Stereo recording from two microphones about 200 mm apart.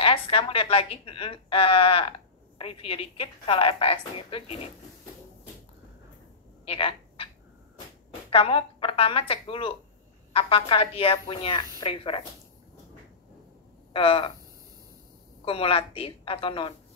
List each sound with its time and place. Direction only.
0.0 s a woman's voice: 25° left (ahead or behind)
6.6 s a sound: 25° left (ahead or behind)
8.3 s a woman's voice: 30° left (ahead or behind)
13.9 s a woman's voice: 25° left (ahead or behind)
15.4 s a woman's voice: 25° left (ahead or behind)